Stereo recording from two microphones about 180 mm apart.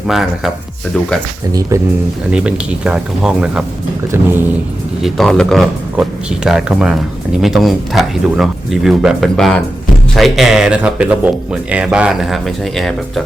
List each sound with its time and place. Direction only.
0.1 s speech: centre (ahead or behind)
1.7 s vehicle: 15° right (ahead or behind)
2.3 s speech: 5° right (ahead or behind)
4.1 s vehicle: 10° right (ahead or behind)
5.0 s speech: centre (ahead or behind)